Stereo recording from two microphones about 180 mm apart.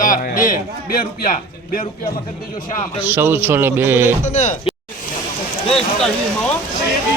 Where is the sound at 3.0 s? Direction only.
10° right (ahead or behind).